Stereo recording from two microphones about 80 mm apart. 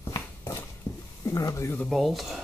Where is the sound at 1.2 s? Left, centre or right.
Left.